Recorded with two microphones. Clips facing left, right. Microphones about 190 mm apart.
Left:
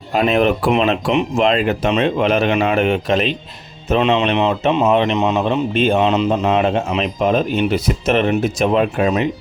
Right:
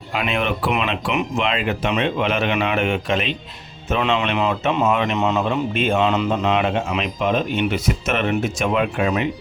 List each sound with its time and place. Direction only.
0.1 s speech: 40° left (ahead or behind)
4.0 s speech: 20° left (ahead or behind)
5.1 s speech: 20° left (ahead or behind)
5.7 s speech: 35° left (ahead or behind)
6.0 s speech: 20° left (ahead or behind)
6.5 s speech: 35° left (ahead or behind)